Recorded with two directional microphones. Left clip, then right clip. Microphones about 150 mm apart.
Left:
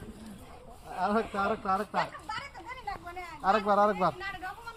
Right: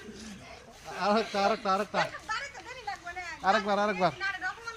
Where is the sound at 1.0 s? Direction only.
25° right (ahead or behind).